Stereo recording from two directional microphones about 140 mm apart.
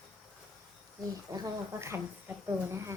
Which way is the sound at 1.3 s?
25° right (ahead or behind).